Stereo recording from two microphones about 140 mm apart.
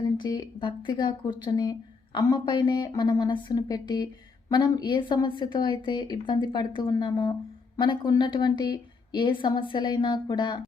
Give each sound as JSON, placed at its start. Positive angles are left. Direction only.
{"t": 0.2, "sound": "a woman's voice", "side_deg": 30}